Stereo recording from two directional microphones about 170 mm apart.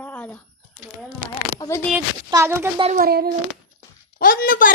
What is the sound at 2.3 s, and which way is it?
Speech, 15° right (ahead or behind).